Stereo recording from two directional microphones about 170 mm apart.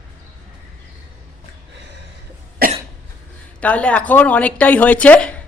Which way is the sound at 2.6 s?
60° right (ahead or behind).